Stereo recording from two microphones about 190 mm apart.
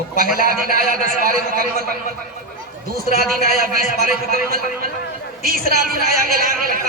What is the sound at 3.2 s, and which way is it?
A woman's voice, 50° right (ahead or behind).